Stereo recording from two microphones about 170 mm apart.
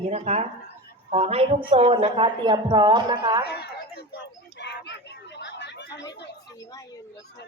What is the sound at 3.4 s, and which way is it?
Chatter, 75° left (ahead or behind).